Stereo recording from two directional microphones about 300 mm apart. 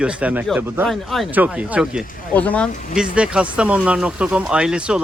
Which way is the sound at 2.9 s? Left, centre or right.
Centre.